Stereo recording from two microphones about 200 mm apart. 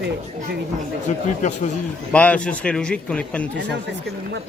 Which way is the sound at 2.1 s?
5° left (ahead or behind).